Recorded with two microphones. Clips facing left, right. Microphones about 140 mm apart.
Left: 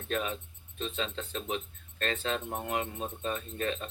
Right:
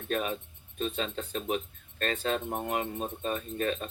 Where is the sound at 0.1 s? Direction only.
40° right (ahead or behind).